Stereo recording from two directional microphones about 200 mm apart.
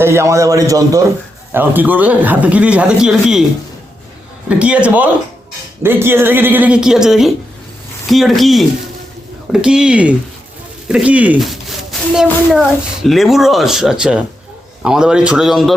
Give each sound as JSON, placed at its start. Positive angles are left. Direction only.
{"t": 0.0, "sound": "speech", "side_deg": -15}
{"t": 4.4, "sound": "speech", "side_deg": -5}